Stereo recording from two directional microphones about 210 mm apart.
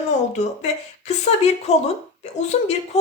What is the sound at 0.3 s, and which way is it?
Speech, 35° left (ahead or behind).